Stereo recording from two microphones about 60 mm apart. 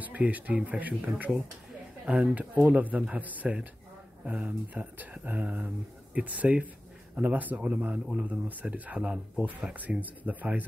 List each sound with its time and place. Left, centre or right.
0.0 s speech: right